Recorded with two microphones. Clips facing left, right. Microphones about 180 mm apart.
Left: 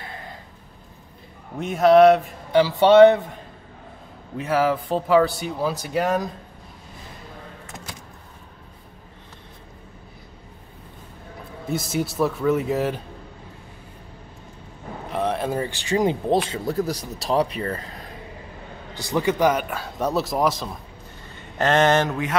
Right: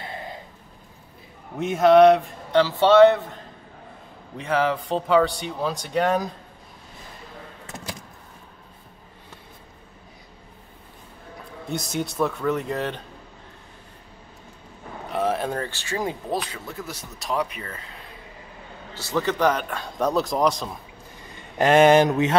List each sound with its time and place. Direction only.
1.6 s speech: centre (ahead or behind)
4.4 s speech: 5° left (ahead or behind)
11.7 s speech: centre (ahead or behind)
15.0 s vehicle: centre (ahead or behind)
15.6 s speech: 15° left (ahead or behind); by 18.0 s 40° left (ahead or behind)
18.9 s speech: 15° left (ahead or behind)
21.5 s speech: 10° right (ahead or behind)